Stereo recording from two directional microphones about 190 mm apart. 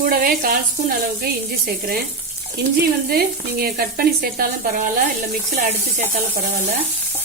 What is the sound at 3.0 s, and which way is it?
Sizzle, 50° right (ahead or behind).